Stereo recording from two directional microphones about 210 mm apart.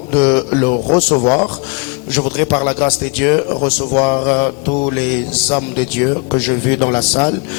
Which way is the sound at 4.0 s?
20° left (ahead or behind).